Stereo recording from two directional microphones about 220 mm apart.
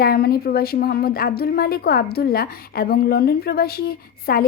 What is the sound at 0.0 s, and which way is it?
A woman's voice, 45° left (ahead or behind).